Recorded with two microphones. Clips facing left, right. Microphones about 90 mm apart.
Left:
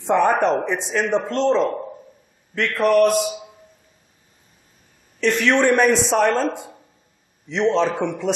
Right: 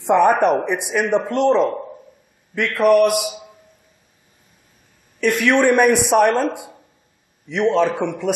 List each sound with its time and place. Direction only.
0.0 s speech: 10° right (ahead or behind)
1.6 s a man's voice: centre (ahead or behind)
5.2 s speech: 10° right (ahead or behind)